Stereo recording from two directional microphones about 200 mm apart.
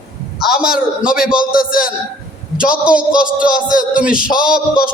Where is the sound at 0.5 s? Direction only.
50° left (ahead or behind).